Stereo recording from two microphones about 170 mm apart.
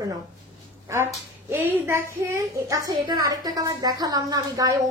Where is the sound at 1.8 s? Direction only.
15° right (ahead or behind).